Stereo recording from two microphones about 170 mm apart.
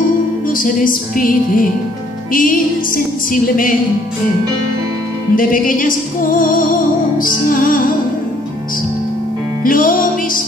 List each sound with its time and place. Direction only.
0.5 s music: 55° left (ahead or behind)
5.3 s music: 55° left (ahead or behind)
9.6 s music: 55° left (ahead or behind)